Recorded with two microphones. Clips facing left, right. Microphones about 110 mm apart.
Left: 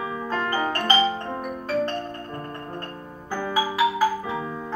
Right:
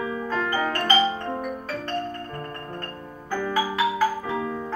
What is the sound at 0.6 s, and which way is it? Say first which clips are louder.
Music: even; 20° left (ahead or behind).